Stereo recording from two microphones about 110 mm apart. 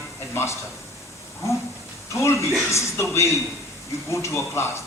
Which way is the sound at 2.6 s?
25° left (ahead or behind).